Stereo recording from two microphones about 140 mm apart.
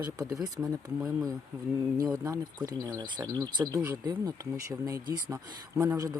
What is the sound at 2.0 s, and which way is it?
Speech, 25° right (ahead or behind).